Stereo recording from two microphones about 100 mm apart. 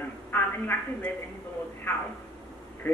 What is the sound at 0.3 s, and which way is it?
Speech, 20° left (ahead or behind).